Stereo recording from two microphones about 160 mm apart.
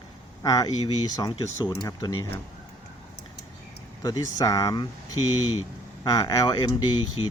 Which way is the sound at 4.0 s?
20° left (ahead or behind).